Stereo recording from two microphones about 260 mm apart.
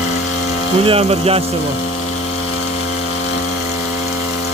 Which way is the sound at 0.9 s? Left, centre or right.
Right.